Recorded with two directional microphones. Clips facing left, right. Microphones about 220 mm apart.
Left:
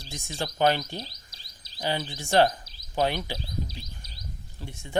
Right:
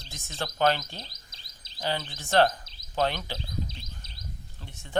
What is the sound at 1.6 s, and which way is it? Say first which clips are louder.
Chirp: left 1 dB; 25° right (ahead or behind).